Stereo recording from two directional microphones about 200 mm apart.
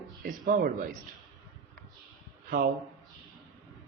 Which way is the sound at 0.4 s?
45° right (ahead or behind).